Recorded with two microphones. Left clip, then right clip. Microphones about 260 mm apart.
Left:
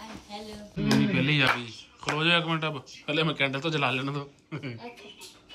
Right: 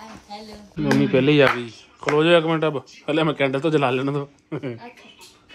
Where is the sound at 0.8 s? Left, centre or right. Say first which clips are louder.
Right 8 dB; centre.